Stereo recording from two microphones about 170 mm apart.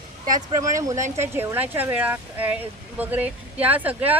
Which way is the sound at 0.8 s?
20° right (ahead or behind).